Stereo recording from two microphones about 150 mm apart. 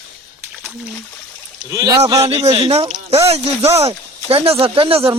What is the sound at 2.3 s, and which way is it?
Speech, 45° right (ahead or behind).